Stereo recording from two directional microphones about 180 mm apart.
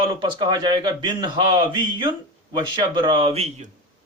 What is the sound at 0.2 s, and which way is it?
Speech, 25° right (ahead or behind).